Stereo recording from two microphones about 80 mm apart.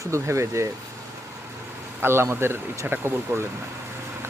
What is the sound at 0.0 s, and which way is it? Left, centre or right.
Speech, right.